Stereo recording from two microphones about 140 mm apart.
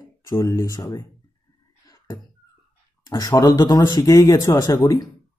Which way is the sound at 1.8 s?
25° left (ahead or behind).